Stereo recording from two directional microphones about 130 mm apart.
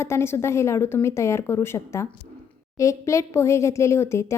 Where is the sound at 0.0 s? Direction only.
20° left (ahead or behind).